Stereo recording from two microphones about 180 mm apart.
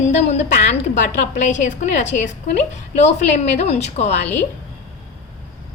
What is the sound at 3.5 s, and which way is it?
Speech, 40° left (ahead or behind).